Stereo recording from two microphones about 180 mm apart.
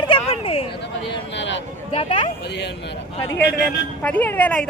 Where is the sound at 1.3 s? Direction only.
90° left.